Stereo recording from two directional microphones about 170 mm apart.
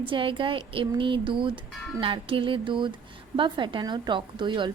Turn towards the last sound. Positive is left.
turn(degrees=-30)  # may be behind; listen again after turning